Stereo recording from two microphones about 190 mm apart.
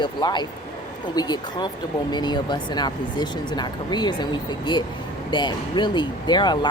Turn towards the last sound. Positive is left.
turn(degrees=25)  # may be behind; listen again after turning